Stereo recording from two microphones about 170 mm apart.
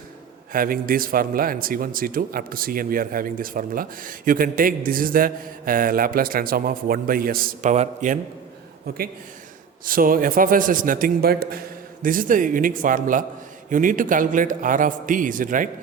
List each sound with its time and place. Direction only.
0.5 s speech: 55° right (ahead or behind)
7.7 s a man's voice: 45° right (ahead or behind)
9.8 s a man's voice: 55° right (ahead or behind)